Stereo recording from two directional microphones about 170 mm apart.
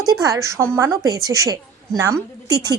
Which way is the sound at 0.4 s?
15° right (ahead or behind).